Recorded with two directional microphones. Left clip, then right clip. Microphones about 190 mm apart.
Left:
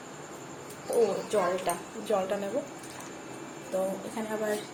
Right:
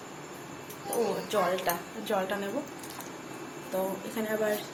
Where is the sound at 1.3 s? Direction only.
Centre (ahead or behind).